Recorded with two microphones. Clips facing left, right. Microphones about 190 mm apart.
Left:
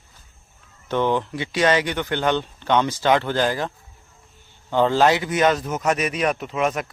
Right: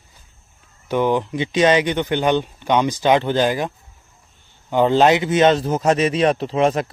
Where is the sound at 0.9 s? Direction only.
10° right (ahead or behind).